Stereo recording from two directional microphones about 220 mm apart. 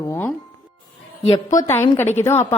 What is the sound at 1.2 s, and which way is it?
Speech, 25° left (ahead or behind).